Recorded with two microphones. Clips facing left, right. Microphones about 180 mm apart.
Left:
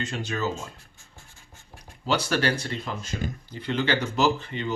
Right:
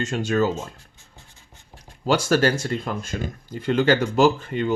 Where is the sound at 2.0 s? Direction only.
45° right (ahead or behind).